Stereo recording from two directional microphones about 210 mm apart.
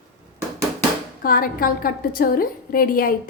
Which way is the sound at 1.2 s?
45° left (ahead or behind).